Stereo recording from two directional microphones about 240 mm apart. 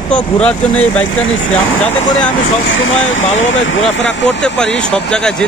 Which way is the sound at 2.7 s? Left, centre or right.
Left.